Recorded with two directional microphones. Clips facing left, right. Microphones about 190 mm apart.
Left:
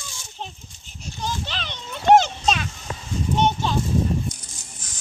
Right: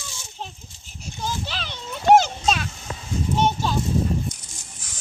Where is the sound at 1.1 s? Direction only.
5° right (ahead or behind).